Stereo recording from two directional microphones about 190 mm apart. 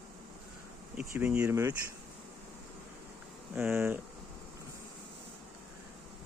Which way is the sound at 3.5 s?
10° right (ahead or behind).